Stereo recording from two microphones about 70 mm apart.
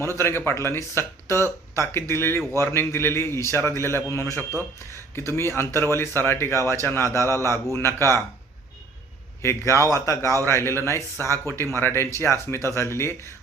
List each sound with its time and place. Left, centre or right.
0.2 s a man's voice: left
9.4 s speech: left
10.4 s a man's voice: left
12.7 s a man's voice: left